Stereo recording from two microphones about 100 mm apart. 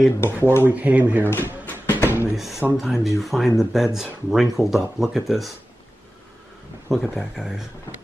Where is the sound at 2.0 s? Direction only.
20° right (ahead or behind).